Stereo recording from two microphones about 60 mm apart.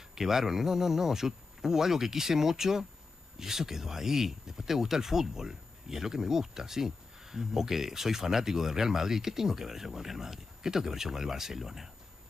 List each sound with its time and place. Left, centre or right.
0.1 s speech: centre